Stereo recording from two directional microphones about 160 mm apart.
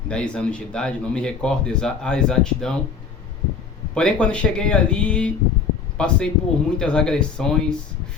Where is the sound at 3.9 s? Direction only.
5° left (ahead or behind).